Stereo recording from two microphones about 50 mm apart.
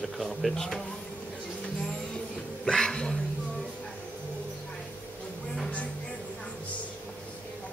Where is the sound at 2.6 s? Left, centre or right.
Centre.